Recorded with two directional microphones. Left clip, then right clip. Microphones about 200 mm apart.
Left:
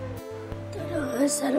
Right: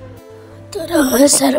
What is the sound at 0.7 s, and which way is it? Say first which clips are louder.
Music: right 15 dB; 50° right (ahead or behind).